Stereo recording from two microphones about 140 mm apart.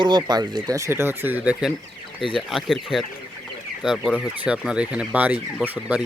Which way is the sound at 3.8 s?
5° right (ahead or behind).